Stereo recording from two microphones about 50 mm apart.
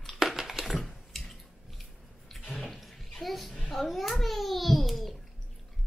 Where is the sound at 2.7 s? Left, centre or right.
Centre.